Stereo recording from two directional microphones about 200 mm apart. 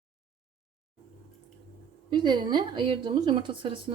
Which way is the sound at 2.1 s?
20° right (ahead or behind).